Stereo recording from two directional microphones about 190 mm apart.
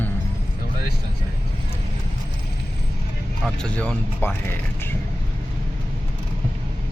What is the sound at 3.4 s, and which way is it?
Speech, 5° left (ahead or behind).